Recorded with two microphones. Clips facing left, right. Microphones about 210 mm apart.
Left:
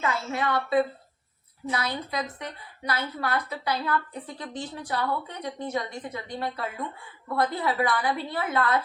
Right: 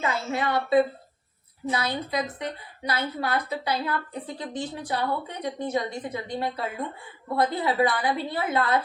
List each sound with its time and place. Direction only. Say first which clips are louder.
0.0 s a woman's voice: right 1 dB; 25° right (ahead or behind)